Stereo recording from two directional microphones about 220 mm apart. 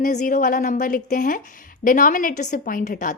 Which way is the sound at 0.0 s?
35° left (ahead or behind).